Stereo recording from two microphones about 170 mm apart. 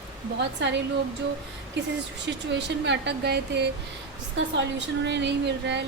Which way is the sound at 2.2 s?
90° right.